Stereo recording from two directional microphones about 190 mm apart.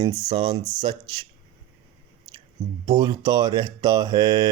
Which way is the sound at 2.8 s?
20° right (ahead or behind).